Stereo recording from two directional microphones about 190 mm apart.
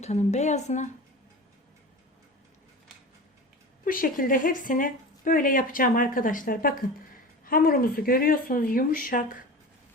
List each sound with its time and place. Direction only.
0.0 s a woman's voice: 35° left (ahead or behind)
3.8 s a woman's voice: 45° left (ahead or behind)